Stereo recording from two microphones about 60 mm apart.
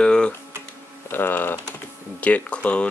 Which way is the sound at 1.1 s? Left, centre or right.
Left.